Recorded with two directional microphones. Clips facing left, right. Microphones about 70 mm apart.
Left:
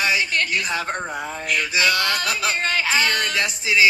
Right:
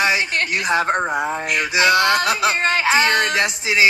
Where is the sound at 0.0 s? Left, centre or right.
Right.